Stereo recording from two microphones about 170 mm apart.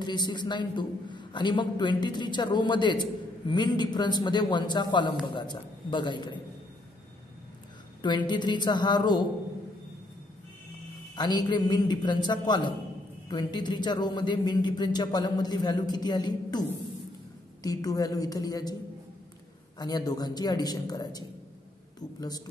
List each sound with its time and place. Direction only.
0.0 s a man's voice: 25° left (ahead or behind)
8.0 s a man's voice: 25° left (ahead or behind)
11.1 s a man's voice: 25° left (ahead or behind)
17.6 s a man's voice: 20° left (ahead or behind)
19.8 s a man's voice: 20° left (ahead or behind)